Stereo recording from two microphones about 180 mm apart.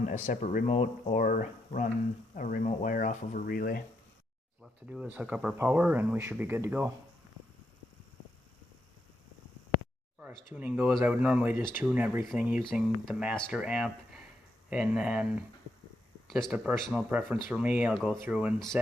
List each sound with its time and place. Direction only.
0.0 s speech: 40° left (ahead or behind)
1.2 s speech: 45° left (ahead or behind)
4.6 s speech: 5° right (ahead or behind)
10.2 s speech: 10° right (ahead or behind)